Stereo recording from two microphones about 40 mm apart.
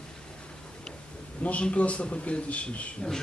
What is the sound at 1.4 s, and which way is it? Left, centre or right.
A man's voice, left.